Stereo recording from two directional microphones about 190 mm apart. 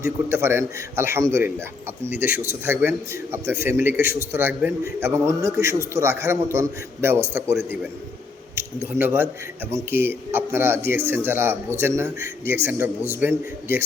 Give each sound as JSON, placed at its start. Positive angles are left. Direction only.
{"t": 0.0, "sound": "a man's voice", "side_deg": -15}
{"t": 2.0, "sound": "speech", "side_deg": 50}
{"t": 2.5, "sound": "a man's voice", "side_deg": -10}